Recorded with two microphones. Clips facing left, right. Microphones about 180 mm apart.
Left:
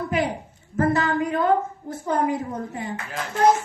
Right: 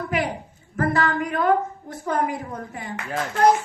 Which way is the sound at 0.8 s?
25° left (ahead or behind).